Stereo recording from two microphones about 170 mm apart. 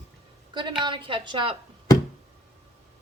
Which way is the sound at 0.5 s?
25° right (ahead or behind).